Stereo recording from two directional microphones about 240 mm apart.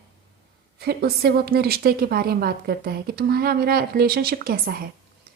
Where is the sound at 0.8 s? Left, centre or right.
Right.